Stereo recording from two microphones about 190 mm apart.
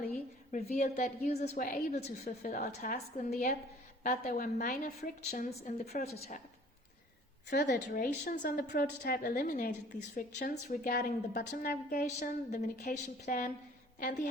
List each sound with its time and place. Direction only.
0.5 s a woman's voice: 40° left (ahead or behind)
7.5 s a woman's voice: 60° left (ahead or behind)